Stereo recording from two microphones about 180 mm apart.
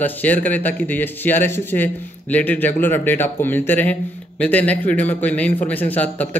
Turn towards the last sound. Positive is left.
turn(degrees=10)  # may be behind; listen again after turning